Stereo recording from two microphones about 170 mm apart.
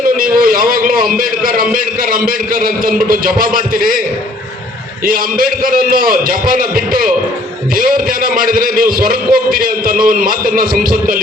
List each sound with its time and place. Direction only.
0.2 s a man's voice: 55° right (ahead or behind)
5.0 s a man's voice: 60° right (ahead or behind)